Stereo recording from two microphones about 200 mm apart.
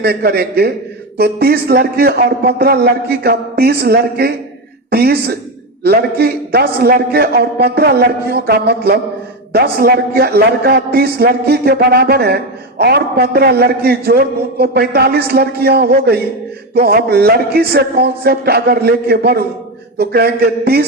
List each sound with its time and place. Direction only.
0.0 s a man's voice: 50° right (ahead or behind)